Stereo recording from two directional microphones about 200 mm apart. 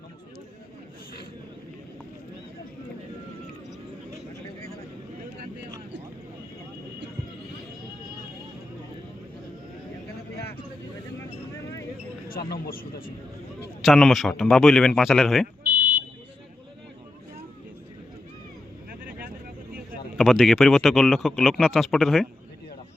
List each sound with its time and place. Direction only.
12.3 s speech: 45° left (ahead or behind)
13.8 s speech: centre (ahead or behind)
20.1 s a man's voice: centre (ahead or behind)